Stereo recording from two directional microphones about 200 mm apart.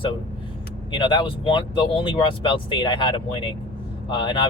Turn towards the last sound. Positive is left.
turn(degrees=25)  # may be behind; listen again after turning